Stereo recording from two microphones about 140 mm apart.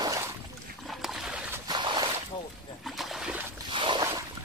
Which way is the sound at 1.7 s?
30° right (ahead or behind).